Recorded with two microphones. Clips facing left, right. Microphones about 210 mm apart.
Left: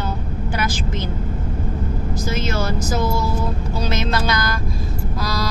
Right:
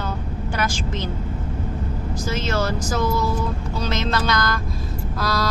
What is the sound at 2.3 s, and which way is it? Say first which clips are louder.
A man's voice: even; 10° left (ahead or behind).